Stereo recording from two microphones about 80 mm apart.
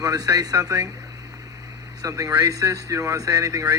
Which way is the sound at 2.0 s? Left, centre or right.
Right.